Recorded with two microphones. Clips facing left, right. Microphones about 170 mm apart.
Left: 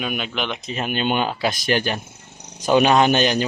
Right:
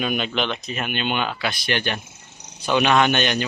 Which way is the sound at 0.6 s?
30° left (ahead or behind).